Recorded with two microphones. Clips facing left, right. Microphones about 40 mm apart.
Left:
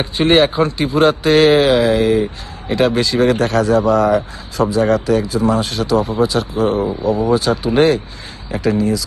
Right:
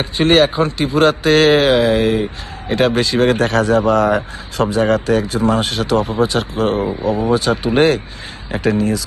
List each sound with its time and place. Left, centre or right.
0.3 s speech: centre
0.9 s speech: right